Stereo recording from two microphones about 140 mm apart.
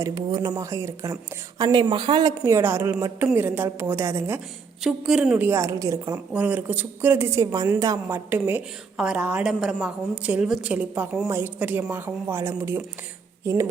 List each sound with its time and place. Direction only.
0.0 s a woman's voice: 30° right (ahead or behind)
4.8 s speech: centre (ahead or behind); by 6.1 s 25° right (ahead or behind)
6.3 s a woman's voice: 10° right (ahead or behind)
8.3 s speech: 15° right (ahead or behind)